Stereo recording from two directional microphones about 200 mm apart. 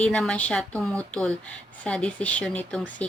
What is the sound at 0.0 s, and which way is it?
Speech, 5° left (ahead or behind).